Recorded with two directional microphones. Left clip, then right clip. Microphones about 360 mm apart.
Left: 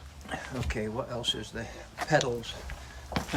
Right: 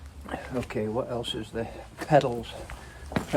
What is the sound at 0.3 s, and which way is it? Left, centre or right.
Speech, centre.